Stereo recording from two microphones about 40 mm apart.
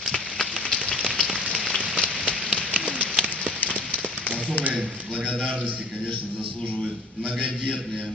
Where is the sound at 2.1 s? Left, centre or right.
Right.